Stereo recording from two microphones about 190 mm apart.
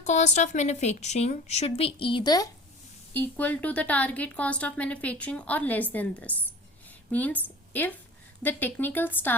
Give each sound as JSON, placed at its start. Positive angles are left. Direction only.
{"t": 0.0, "sound": "a woman's voice", "side_deg": 40}
{"t": 3.1, "sound": "a woman's voice", "side_deg": 10}